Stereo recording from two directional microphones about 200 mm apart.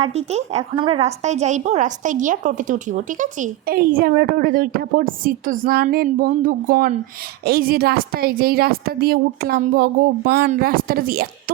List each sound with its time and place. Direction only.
0.0 s a woman's voice: 30° right (ahead or behind); by 11.5 s 45° right (ahead or behind)